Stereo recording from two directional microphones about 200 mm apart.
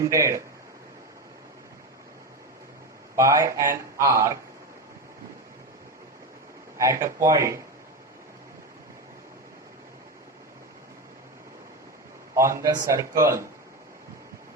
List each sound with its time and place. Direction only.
0.0 s speech: 15° right (ahead or behind)
3.2 s speech: 15° right (ahead or behind)
6.7 s speech: 15° right (ahead or behind)
12.3 s a man's voice: 15° right (ahead or behind)